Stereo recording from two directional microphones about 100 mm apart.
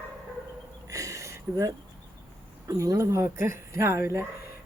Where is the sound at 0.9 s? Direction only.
35° right (ahead or behind).